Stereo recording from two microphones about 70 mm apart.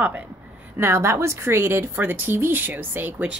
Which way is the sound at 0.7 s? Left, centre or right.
Right.